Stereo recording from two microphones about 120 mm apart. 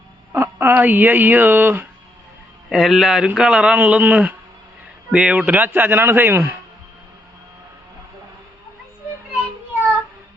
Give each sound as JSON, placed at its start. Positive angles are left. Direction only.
{"t": 0.3, "sound": "speech", "side_deg": -20}
{"t": 2.6, "sound": "speech", "side_deg": -5}